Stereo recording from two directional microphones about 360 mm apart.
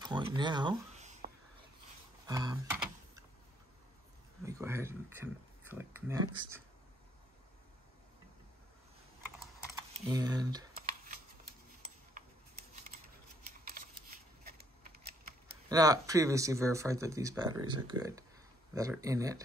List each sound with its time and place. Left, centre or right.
0.0 s a sound: centre
2.2 s computer keyboard: centre
4.5 s speech: centre
10.0 s speech: centre
12.2 s a sound: right
13.8 s shuffling cards: right
14.4 s typewriter: right
15.7 s speech: centre